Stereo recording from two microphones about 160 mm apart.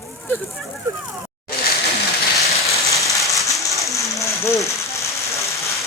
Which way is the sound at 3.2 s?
Centre (ahead or behind).